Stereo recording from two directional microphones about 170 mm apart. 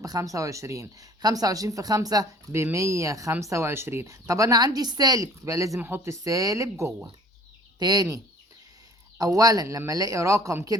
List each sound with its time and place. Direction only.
0.0 s speech: 20° right (ahead or behind)